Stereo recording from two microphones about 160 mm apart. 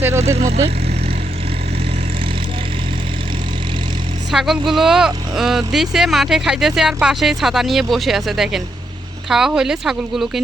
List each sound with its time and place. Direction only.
0.3 s vehicle: 40° right (ahead or behind)
4.3 s speech: centre (ahead or behind)